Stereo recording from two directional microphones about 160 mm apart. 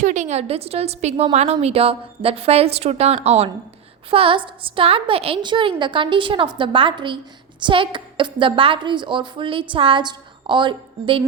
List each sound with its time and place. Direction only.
0.0 s a woman's voice: 50° right (ahead or behind); by 11.2 s 30° right (ahead or behind)